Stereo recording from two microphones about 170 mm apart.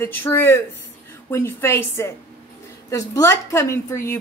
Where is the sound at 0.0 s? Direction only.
10° left (ahead or behind).